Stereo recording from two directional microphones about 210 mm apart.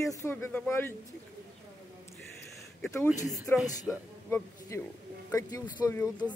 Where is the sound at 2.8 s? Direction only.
10° left (ahead or behind).